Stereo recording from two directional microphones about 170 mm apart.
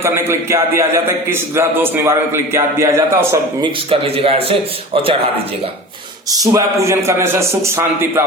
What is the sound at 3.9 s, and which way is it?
A man's voice, 35° right (ahead or behind).